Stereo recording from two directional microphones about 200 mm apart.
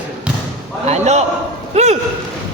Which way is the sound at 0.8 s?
35° right (ahead or behind).